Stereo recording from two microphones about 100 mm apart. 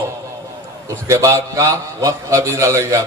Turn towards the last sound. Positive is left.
turn(degrees=-30)  # may be behind; listen again after turning